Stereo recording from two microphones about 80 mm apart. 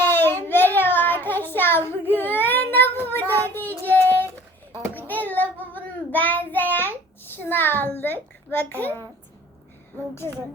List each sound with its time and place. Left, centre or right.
0.1 s child singing: left